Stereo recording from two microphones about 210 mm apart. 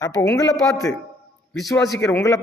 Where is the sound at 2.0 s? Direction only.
15° left (ahead or behind).